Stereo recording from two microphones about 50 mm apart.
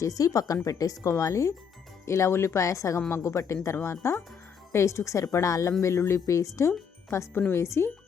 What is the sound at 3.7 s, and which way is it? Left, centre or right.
Speech, left.